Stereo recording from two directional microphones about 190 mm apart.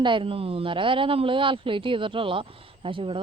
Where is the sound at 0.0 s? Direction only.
25° right (ahead or behind).